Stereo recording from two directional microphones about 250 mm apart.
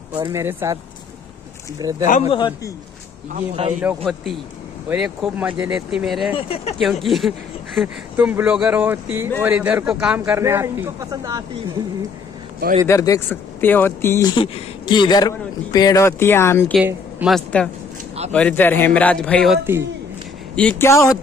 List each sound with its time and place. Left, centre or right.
0.2 s a man's voice: centre
1.8 s a man's voice: centre
2.0 s speech: left
2.3 s speech: centre
3.3 s a man's voice: right
3.8 s speech: centre
6.3 s speech: left
6.8 s a man's voice: centre
12.5 s a man's voice: right
12.8 s speech: centre
16.7 s speech: centre
20.5 s speech: centre